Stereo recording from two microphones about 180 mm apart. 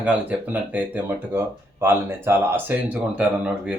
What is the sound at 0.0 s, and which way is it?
Speech, 10° right (ahead or behind).